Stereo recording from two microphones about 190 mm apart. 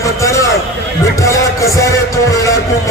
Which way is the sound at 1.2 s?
15° left (ahead or behind).